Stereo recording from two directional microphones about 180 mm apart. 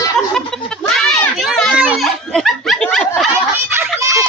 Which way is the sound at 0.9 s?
5° left (ahead or behind).